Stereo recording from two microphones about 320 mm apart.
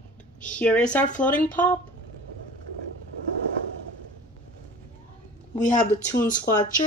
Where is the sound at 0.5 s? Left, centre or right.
Centre.